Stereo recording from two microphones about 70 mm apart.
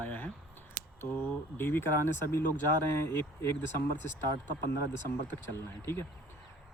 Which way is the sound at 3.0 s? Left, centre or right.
Left.